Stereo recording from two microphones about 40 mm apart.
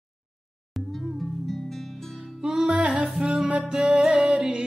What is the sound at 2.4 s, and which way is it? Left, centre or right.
Music, centre.